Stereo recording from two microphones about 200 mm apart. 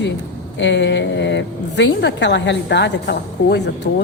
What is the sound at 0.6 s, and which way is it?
A woman's voice, 65° left (ahead or behind).